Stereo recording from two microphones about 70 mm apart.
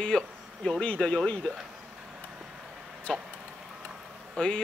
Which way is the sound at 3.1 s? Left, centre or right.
Centre.